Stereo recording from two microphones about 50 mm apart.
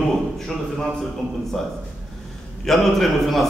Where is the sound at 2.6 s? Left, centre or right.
Centre.